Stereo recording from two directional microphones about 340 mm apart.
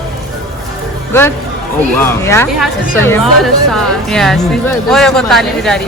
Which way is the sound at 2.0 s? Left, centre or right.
Centre.